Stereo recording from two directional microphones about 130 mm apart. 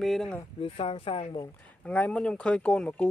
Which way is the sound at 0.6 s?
45° left (ahead or behind).